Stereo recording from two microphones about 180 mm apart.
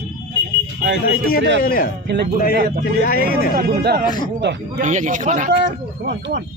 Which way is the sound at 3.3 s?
50° left (ahead or behind).